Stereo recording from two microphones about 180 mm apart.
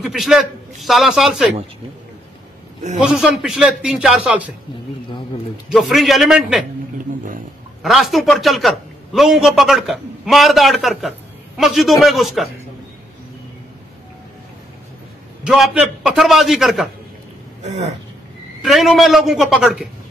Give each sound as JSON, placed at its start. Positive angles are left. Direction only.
{"t": 0.0, "sound": "a man's voice", "side_deg": 0}
{"t": 3.0, "sound": "a man's voice", "side_deg": -5}
{"t": 5.7, "sound": "a man's voice", "side_deg": 0}
{"t": 7.8, "sound": "a man's voice", "side_deg": 0}
{"t": 15.4, "sound": "a man's voice", "side_deg": -5}
{"t": 17.6, "sound": "speech", "side_deg": -40}
{"t": 18.6, "sound": "a man's voice", "side_deg": 0}